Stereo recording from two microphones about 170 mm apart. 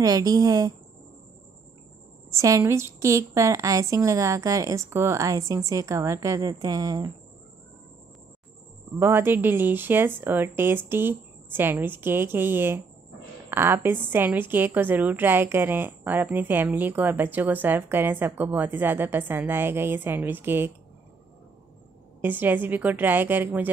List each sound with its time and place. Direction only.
0.0 s a woman's voice: 20° right (ahead or behind)
2.3 s a woman's voice: 20° right (ahead or behind)
9.0 s a woman's voice: 10° right (ahead or behind)
22.2 s a woman's voice: 10° right (ahead or behind)